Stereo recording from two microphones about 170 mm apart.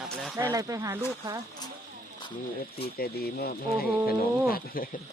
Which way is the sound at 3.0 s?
65° left (ahead or behind).